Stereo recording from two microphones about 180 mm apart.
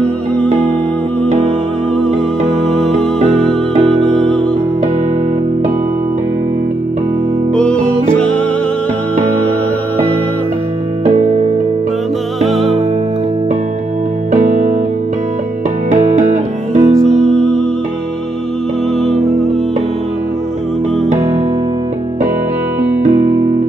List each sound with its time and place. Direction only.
0.0 s music: 10° left (ahead or behind)
2.8 s music: centre (ahead or behind)
7.5 s music: 5° left (ahead or behind)
12.4 s music: centre (ahead or behind)
14.3 s music: 40° right (ahead or behind)
15.9 s music: 40° right (ahead or behind)
17.0 s music: 5° left (ahead or behind)
18.9 s music: centre (ahead or behind)